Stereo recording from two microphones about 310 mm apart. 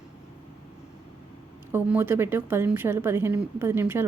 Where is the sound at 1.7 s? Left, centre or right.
Centre.